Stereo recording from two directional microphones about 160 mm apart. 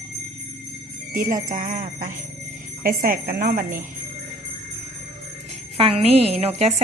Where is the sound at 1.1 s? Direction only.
60° right (ahead or behind).